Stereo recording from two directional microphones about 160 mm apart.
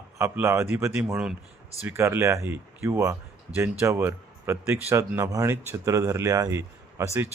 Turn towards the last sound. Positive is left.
turn(degrees=-20)  # may be behind; listen again after turning